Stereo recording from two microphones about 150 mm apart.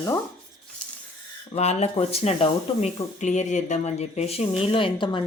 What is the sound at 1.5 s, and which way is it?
Speech, 45° left (ahead or behind).